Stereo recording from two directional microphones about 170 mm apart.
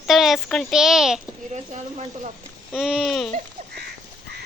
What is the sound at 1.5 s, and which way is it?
Speech, 45° right (ahead or behind).